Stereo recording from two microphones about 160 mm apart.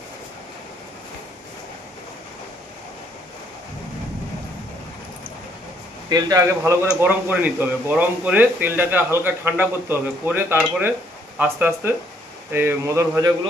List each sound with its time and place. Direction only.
6.1 s speech: 25° right (ahead or behind)
7.0 s a man's voice: 10° right (ahead or behind)